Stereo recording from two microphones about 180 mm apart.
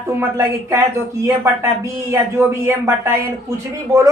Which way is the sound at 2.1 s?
15° right (ahead or behind).